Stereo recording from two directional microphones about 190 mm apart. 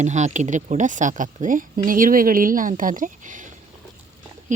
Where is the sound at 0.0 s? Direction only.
40° right (ahead or behind).